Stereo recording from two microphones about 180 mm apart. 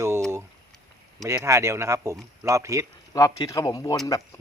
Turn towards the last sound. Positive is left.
turn(degrees=20)  # may be behind; listen again after turning